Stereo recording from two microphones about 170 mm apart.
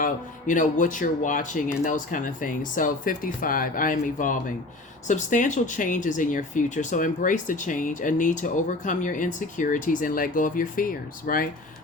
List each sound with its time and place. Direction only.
0.0 s speech: 50° left (ahead or behind)